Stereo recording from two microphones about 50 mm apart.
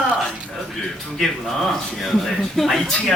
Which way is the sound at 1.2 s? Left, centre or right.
Centre.